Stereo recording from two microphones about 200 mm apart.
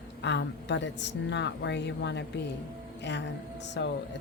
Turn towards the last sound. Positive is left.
turn(degrees=60)  # may be behind; listen again after turning